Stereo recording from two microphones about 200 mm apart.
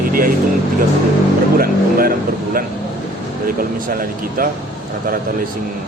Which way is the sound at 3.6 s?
45° right (ahead or behind).